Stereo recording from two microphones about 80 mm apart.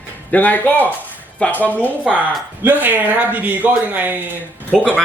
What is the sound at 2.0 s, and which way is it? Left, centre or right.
Speech, centre.